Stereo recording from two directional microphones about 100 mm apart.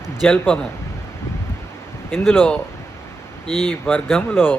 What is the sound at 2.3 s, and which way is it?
Speech, 20° left (ahead or behind).